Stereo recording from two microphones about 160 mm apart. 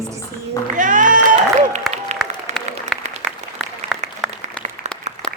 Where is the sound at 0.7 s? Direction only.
55° right (ahead or behind).